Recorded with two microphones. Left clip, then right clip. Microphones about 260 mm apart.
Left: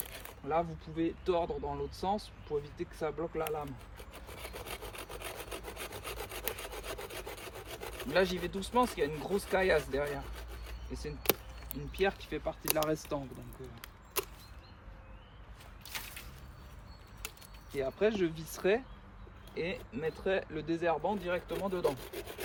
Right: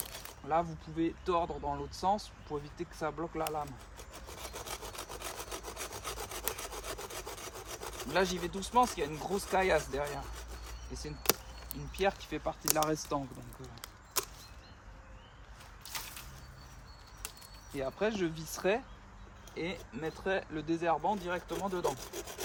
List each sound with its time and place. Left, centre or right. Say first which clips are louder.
0.1 s speech: right 1 dB; centre
4.4 s sawing: right 1 dB; centre
10.9 s speech: even; centre
17.7 s speech: left 3 dB; centre